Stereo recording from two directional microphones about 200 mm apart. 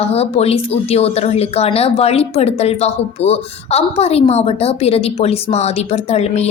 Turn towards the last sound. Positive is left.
turn(degrees=30)  # may be behind; listen again after turning